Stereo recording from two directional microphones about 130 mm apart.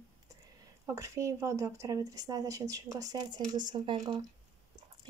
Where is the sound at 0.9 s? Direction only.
25° right (ahead or behind).